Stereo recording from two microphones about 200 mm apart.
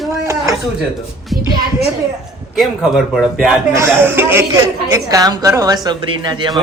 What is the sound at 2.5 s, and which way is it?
A man's voice, centre (ahead or behind).